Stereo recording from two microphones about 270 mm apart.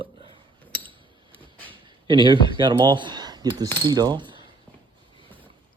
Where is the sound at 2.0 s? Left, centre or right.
Centre.